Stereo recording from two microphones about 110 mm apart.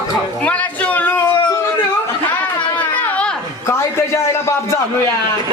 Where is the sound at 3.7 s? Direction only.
25° left (ahead or behind).